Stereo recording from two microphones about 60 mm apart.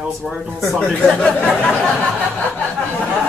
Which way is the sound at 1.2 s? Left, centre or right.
Left.